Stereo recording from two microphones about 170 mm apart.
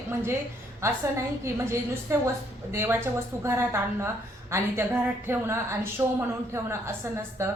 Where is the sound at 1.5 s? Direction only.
15° right (ahead or behind).